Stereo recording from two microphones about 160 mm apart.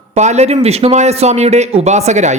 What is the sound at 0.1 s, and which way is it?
A man's voice, 45° right (ahead or behind).